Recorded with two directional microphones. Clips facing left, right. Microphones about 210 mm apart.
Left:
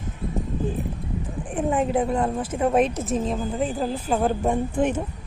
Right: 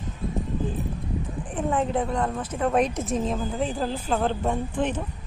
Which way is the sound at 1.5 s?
10° left (ahead or behind).